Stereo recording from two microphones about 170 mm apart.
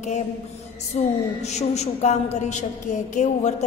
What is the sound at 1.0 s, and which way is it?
A woman's voice, 45° left (ahead or behind).